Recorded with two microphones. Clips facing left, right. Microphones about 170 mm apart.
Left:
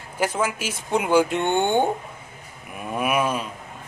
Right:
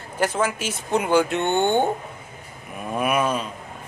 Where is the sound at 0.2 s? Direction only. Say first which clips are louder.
Right 1 dB; 10° left (ahead or behind).